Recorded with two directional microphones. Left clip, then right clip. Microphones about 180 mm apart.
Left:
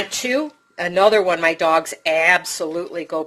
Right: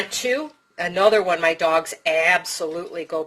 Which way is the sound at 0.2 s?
30° left (ahead or behind).